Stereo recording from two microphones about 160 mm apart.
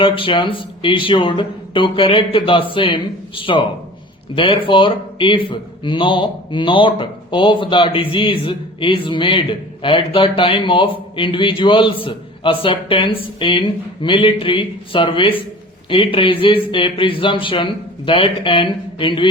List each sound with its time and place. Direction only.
0.0 s speech: 35° left (ahead or behind)